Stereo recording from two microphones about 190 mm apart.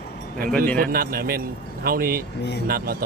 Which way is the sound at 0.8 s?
50° right (ahead or behind).